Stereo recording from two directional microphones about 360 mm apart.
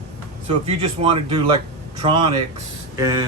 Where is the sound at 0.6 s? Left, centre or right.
Centre.